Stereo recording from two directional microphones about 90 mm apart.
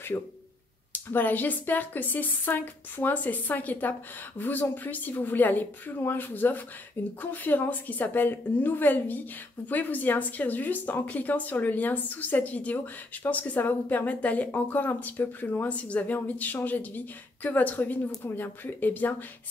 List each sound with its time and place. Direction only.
0.1 s speech: 30° left (ahead or behind)